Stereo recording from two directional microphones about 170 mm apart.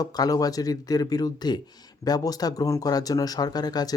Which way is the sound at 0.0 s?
20° left (ahead or behind).